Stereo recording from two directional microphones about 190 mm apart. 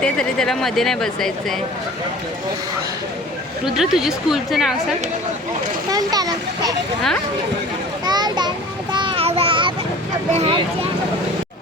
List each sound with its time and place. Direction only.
0.0 s speech: 5° left (ahead or behind)
3.8 s speech: centre (ahead or behind)
5.9 s a child's voice: 20° right (ahead or behind)
8.0 s a sound: 20° right (ahead or behind)
10.3 s a child's voice: 30° right (ahead or behind)